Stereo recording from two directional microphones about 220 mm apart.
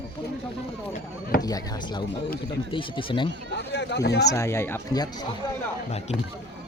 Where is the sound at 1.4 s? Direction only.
15° left (ahead or behind).